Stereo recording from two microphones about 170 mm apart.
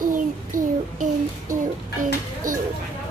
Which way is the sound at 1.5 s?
50° right (ahead or behind).